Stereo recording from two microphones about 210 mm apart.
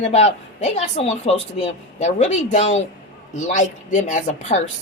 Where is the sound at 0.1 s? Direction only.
30° left (ahead or behind).